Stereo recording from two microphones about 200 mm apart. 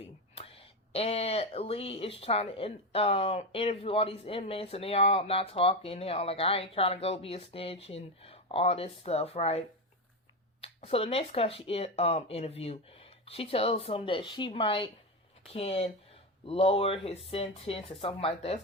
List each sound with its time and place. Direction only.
0.3 s speech: 30° left (ahead or behind)